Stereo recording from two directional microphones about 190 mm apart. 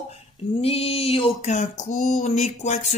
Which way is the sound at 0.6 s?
30° left (ahead or behind).